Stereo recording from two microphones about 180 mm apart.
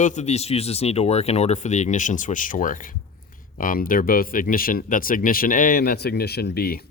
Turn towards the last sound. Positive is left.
turn(degrees=55)  # may be behind; listen again after turning